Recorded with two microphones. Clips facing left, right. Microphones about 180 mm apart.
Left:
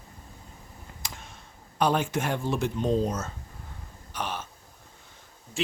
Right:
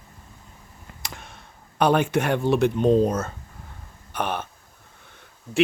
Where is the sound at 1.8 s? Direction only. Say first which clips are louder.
Right 5 dB; 65° right (ahead or behind).